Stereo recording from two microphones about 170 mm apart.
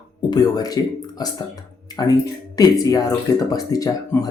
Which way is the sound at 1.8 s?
25° left (ahead or behind).